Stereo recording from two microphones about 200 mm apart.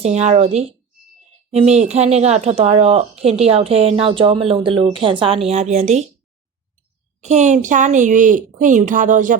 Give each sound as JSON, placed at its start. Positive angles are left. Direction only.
{"t": 0.0, "sound": "a woman's voice", "side_deg": -35}
{"t": 7.2, "sound": "a woman's voice", "side_deg": -35}